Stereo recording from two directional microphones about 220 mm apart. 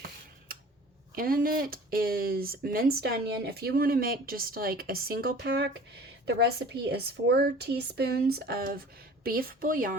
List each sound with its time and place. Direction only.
1.1 s speech: 40° right (ahead or behind)